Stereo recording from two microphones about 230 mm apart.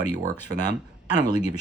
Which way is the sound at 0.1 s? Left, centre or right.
Centre.